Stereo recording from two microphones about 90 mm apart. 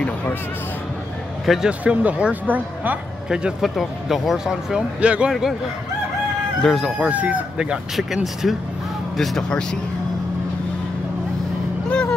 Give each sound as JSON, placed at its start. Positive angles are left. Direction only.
{"t": 0.0, "sound": "speech", "side_deg": 15}
{"t": 1.4, "sound": "speech", "side_deg": 0}
{"t": 1.7, "sound": "speech", "side_deg": -15}
{"t": 3.3, "sound": "speech", "side_deg": -5}
{"t": 5.3, "sound": "speech", "side_deg": 0}
{"t": 6.6, "sound": "speech", "side_deg": 0}
{"t": 7.0, "sound": "speech", "side_deg": -15}